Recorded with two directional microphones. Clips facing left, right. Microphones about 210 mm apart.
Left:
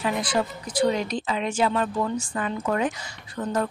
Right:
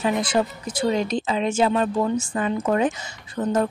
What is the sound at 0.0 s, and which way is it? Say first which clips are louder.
Speech: right 3 dB; 25° right (ahead or behind).